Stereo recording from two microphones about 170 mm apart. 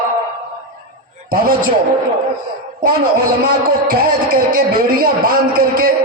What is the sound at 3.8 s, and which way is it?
Speech, 60° right (ahead or behind).